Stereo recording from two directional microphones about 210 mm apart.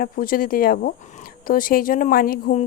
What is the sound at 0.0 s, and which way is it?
Speech, 45° left (ahead or behind).